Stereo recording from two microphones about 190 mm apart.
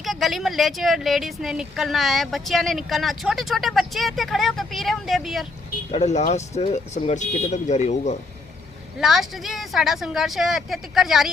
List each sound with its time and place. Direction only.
0.0 s speech: centre (ahead or behind)
5.9 s speech: 35° left (ahead or behind)
9.0 s speech: centre (ahead or behind)